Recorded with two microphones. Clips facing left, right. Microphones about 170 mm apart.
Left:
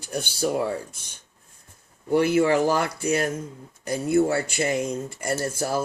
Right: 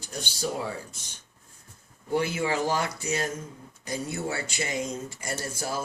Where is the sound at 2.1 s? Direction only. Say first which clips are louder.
Left 8 dB; 55° left (ahead or behind).